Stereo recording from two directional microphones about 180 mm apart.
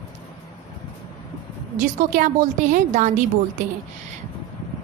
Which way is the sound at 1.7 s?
50° right (ahead or behind).